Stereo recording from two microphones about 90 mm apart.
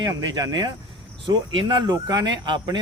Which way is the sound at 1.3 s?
60° right (ahead or behind).